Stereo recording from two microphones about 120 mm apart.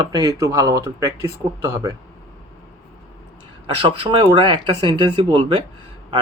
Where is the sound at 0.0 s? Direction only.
35° right (ahead or behind).